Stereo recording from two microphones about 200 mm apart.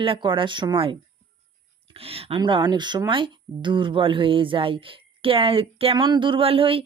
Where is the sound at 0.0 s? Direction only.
25° right (ahead or behind).